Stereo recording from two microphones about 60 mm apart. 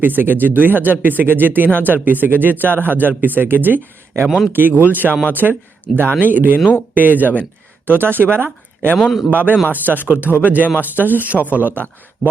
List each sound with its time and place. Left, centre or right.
0.0 s speech: right
9.0 s a man's voice: centre
9.3 s speech: right